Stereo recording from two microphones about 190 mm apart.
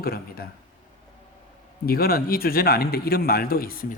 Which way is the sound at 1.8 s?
50° left (ahead or behind).